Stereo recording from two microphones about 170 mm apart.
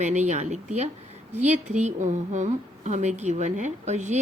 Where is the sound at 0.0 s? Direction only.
45° right (ahead or behind).